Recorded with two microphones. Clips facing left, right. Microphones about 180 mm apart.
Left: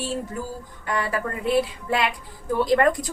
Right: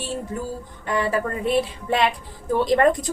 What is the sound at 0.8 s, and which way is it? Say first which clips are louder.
A woman's voice: right 3 dB; 25° right (ahead or behind).